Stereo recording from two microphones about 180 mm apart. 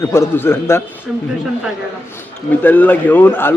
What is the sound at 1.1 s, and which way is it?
Speech, 5° right (ahead or behind).